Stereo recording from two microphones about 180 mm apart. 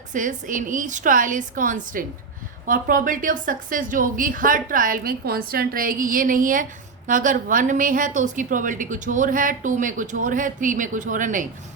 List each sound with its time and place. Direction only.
0.1 s a woman's voice: 45° right (ahead or behind)